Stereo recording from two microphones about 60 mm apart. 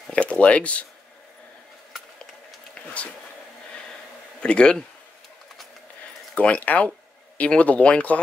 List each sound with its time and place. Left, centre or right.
0.1 s speech: left
4.4 s speech: centre
6.3 s speech: left